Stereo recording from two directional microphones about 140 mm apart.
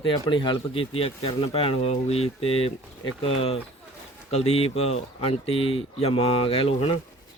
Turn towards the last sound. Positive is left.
turn(degrees=45)  # may be behind; listen again after turning